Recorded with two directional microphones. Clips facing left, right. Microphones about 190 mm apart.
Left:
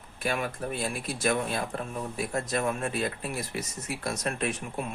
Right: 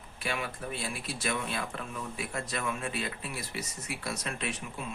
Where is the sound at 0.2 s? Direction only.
45° left (ahead or behind).